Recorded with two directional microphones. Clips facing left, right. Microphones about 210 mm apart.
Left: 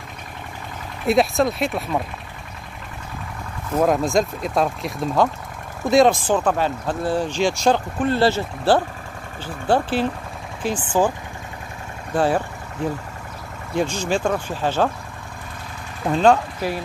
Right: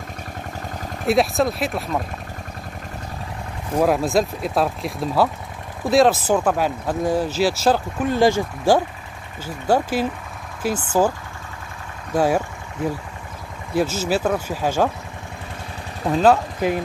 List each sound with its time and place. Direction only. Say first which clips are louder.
1.0 s speech: left 1 dB; centre (ahead or behind)
3.7 s speech: even; 5° right (ahead or behind)
16.1 s speech: even; 5° right (ahead or behind)
16.6 s speech: right 8 dB; 15° right (ahead or behind)